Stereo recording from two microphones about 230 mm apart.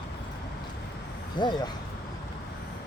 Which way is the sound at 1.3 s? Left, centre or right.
Centre.